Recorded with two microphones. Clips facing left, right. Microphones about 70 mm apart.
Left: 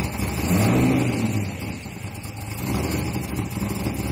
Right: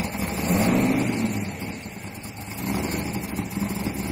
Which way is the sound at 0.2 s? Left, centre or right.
Right.